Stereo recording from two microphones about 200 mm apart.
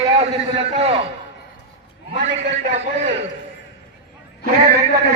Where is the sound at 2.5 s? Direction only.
35° right (ahead or behind).